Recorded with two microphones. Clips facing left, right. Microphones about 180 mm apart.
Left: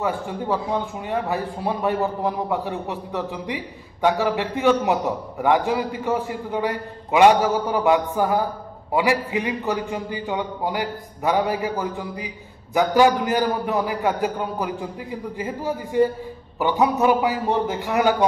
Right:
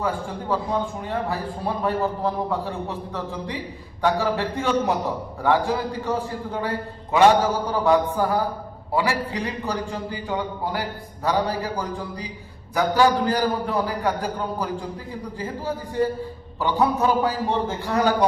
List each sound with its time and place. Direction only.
1.0 s a man's voice: 20° left (ahead or behind)